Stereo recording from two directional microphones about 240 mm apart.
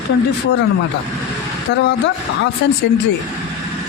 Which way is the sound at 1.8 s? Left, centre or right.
Left.